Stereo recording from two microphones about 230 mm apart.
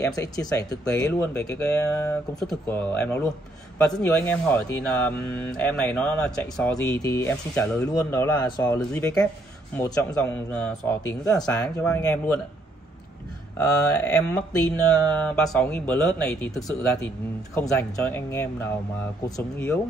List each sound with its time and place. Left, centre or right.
0.0 s speech: centre
13.6 s speech: centre
17.6 s speech: centre